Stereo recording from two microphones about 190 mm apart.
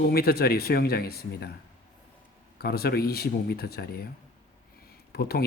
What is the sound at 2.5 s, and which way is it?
A man's voice, 55° left (ahead or behind).